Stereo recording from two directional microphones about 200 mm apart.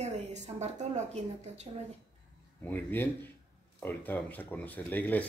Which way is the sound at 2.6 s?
10° left (ahead or behind).